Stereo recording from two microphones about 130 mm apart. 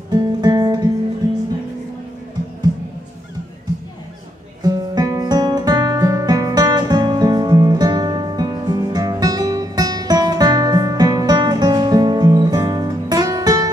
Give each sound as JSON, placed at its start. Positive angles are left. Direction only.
{"t": 0.1, "sound": "music", "side_deg": -30}
{"t": 4.6, "sound": "music", "side_deg": -25}